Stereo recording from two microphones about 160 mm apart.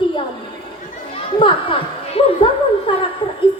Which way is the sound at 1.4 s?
35° left (ahead or behind).